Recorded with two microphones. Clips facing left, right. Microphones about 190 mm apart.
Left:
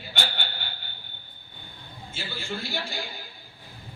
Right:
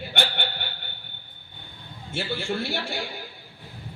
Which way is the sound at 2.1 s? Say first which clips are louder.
Right 7 dB; 70° right (ahead or behind).